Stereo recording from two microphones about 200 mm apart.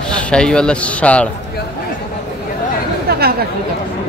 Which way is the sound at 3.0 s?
50° right (ahead or behind).